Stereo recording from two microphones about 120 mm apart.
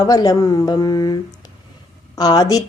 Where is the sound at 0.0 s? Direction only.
35° left (ahead or behind).